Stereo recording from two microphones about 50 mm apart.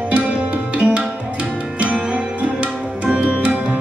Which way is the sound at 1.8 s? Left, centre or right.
Right.